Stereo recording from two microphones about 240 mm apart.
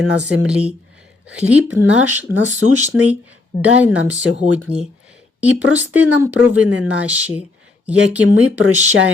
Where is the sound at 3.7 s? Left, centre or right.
Centre.